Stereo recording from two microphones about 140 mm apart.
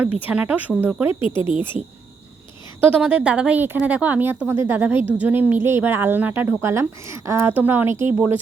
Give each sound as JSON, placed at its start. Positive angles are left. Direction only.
{"t": 0.0, "sound": "speech", "side_deg": -10}
{"t": 1.2, "sound": "speech", "side_deg": 40}
{"t": 2.8, "sound": "speech", "side_deg": -10}